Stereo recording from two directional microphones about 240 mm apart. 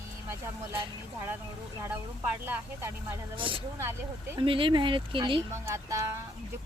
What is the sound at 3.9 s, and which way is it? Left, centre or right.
Speech, centre.